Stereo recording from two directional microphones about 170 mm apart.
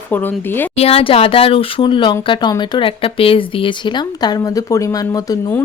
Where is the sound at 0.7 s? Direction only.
35° left (ahead or behind).